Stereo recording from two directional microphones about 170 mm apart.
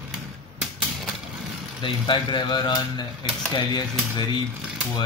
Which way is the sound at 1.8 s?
30° left (ahead or behind).